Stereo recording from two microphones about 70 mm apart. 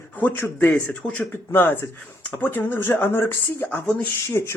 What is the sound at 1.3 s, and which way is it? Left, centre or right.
Speech, left.